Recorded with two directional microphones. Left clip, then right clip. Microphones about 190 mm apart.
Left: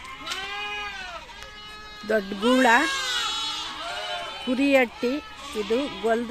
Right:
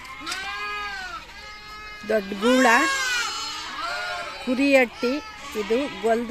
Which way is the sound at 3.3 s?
60° left (ahead or behind).